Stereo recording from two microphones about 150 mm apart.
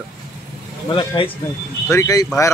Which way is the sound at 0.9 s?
35° left (ahead or behind).